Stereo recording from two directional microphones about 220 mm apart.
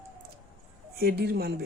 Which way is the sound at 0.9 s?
45° right (ahead or behind).